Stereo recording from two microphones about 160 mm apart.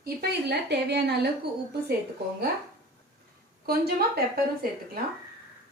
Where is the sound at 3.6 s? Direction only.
75° right (ahead or behind).